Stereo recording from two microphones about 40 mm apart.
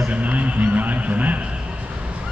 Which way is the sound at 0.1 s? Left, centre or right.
Right.